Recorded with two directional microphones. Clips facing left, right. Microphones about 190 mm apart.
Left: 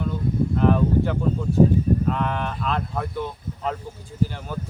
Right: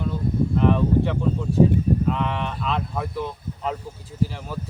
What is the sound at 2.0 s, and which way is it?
Speech, centre (ahead or behind).